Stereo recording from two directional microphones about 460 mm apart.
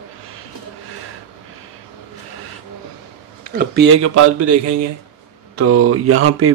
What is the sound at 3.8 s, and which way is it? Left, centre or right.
Speech, right.